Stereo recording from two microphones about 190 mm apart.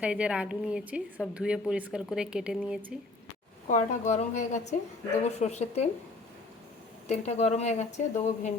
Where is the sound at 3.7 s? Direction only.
40° left (ahead or behind).